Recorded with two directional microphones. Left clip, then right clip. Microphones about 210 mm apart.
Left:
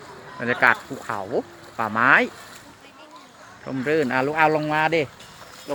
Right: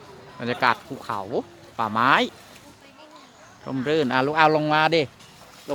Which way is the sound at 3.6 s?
15° right (ahead or behind).